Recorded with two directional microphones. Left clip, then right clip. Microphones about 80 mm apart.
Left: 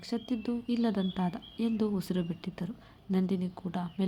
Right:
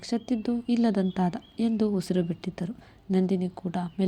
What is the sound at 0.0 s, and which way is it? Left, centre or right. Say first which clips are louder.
Speech: right 5 dB; right.